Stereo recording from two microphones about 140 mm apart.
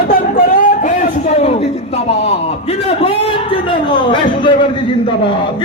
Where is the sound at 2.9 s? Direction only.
45° left (ahead or behind).